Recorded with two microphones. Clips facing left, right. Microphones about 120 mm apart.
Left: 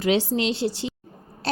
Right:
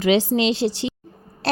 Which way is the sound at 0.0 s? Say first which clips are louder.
Right 4 dB; 90° right.